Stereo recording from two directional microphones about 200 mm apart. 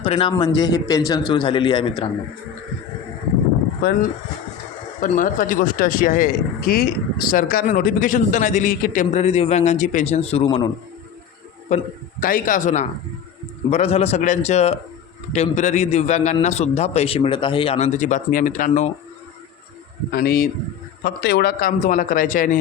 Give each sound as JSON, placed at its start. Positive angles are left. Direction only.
{"t": 0.0, "sound": "speech", "side_deg": 25}
{"t": 4.9, "sound": "speech", "side_deg": 40}
{"t": 11.7, "sound": "speech", "side_deg": 35}
{"t": 20.1, "sound": "a man's voice", "side_deg": 50}